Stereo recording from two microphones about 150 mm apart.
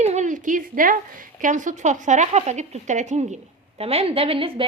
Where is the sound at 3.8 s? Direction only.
40° right (ahead or behind).